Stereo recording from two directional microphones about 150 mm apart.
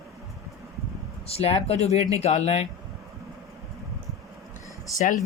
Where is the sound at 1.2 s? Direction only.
40° left (ahead or behind).